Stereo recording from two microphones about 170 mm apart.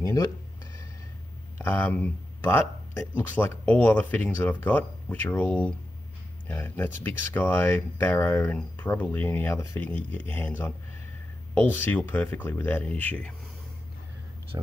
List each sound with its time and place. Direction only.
0.0 s a sound: 20° left (ahead or behind)
1.6 s speech: 10° left (ahead or behind)
14.5 s speech: 20° right (ahead or behind)